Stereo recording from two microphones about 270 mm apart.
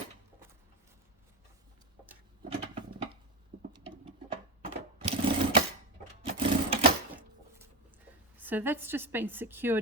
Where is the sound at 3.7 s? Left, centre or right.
Centre.